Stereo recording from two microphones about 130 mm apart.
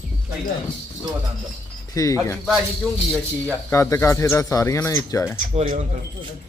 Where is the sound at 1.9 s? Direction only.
25° left (ahead or behind).